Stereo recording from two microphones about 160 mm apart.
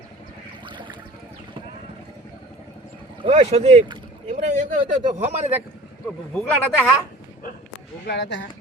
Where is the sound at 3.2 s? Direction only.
35° right (ahead or behind).